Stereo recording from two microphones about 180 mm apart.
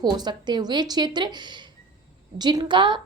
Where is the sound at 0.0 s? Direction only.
25° right (ahead or behind).